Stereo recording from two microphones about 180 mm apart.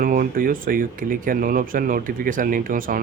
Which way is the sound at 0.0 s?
50° right (ahead or behind).